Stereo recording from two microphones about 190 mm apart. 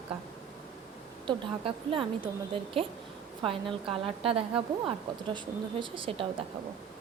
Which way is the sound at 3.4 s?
30° right (ahead or behind).